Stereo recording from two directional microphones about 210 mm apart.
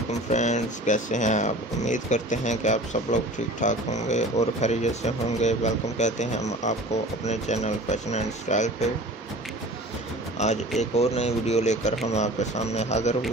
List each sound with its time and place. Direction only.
0.3 s speech: 35° left (ahead or behind)
10.8 s speech: 30° left (ahead or behind)